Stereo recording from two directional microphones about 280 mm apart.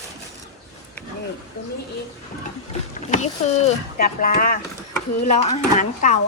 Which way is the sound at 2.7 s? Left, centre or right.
Left.